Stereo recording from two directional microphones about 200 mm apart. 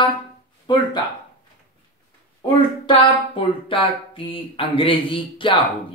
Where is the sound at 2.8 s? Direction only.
25° left (ahead or behind).